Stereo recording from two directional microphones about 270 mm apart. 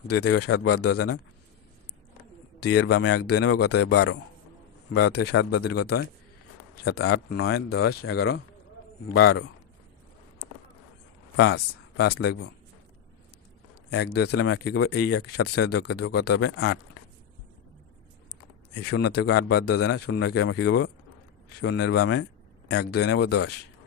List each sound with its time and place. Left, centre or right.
0.3 s speech: left
2.8 s speech: left
3.3 s speech: left
5.1 s speech: left
5.4 s speech: left
5.7 s speech: left
6.8 s speech: left
11.3 s speech: left
13.9 s speech: left
14.3 s speech: left
14.6 s speech: left
15.0 s speech: left
15.7 s speech: left
18.8 s speech: left